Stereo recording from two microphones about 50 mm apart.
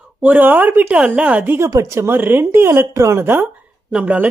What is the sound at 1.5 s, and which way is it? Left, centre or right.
Speech, right.